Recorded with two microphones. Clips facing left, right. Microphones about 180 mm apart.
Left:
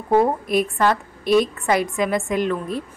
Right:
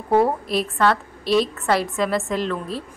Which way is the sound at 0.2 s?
Centre (ahead or behind).